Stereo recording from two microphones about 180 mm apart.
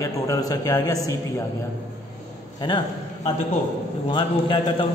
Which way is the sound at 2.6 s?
25° left (ahead or behind).